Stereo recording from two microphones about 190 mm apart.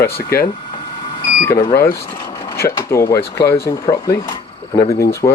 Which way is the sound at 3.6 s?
15° left (ahead or behind).